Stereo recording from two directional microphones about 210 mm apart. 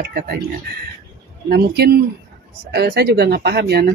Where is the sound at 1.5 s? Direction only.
50° right (ahead or behind).